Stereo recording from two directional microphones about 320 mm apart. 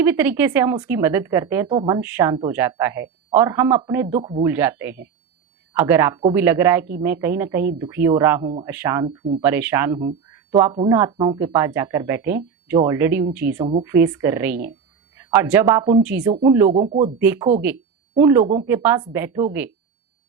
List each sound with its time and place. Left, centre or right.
0.0 s speech: centre
17.2 s speech: centre